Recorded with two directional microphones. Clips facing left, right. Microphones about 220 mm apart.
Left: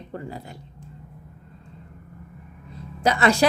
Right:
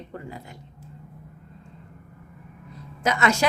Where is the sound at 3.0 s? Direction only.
35° left (ahead or behind).